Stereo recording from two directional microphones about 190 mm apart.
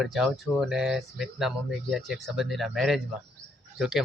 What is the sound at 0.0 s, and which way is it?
Speech, centre (ahead or behind).